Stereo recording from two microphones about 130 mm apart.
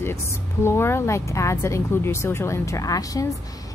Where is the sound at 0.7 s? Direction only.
20° left (ahead or behind).